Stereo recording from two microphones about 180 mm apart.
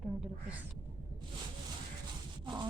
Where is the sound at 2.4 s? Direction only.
25° right (ahead or behind).